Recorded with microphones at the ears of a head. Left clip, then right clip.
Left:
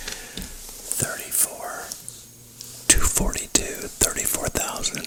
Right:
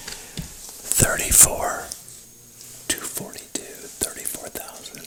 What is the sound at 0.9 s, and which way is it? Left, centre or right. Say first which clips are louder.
Whispering: right 10 dB; right.